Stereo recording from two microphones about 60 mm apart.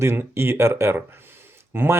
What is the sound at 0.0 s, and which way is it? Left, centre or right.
Speech, right.